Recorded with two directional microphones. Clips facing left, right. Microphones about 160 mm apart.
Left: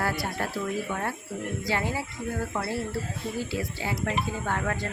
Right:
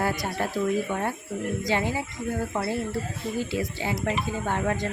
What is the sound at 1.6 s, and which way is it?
Speech, 20° right (ahead or behind).